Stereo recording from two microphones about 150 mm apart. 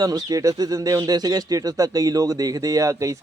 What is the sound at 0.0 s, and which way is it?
A man's voice, 25° right (ahead or behind).